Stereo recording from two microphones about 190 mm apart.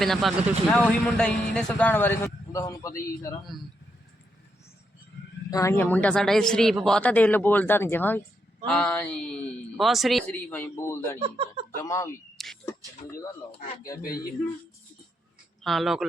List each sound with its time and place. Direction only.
0.0 s speech: centre (ahead or behind); by 2.9 s 15° left (ahead or behind)
5.5 s a man's voice: 15° left (ahead or behind)
11.2 s speech: 30° right (ahead or behind)
11.8 s a man's voice: 15° left (ahead or behind)
12.4 s a sound: centre (ahead or behind)
15.6 s speech: centre (ahead or behind)